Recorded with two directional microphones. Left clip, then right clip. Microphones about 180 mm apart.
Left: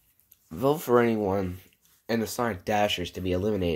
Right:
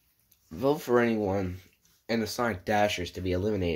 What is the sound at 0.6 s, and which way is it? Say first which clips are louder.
Speech: left 2 dB; 20° left (ahead or behind).